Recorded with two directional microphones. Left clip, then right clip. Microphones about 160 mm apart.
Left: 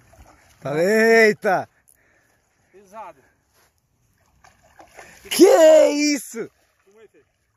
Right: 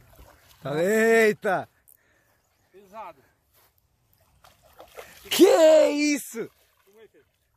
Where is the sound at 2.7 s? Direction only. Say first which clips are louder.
Left 3 dB; 65° left (ahead or behind).